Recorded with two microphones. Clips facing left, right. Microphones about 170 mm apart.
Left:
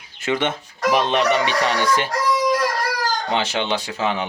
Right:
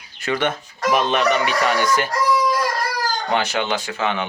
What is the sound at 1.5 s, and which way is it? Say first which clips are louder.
Speech: right 1 dB; 30° left (ahead or behind).